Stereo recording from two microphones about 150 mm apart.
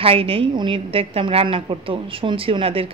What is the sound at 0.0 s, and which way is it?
A woman's voice, 40° right (ahead or behind).